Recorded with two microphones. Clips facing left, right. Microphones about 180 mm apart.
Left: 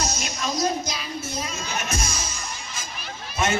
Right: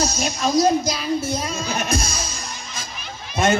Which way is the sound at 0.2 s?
30° right (ahead or behind).